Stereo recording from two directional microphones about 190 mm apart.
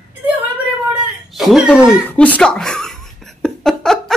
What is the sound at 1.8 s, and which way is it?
Speech, 5° right (ahead or behind).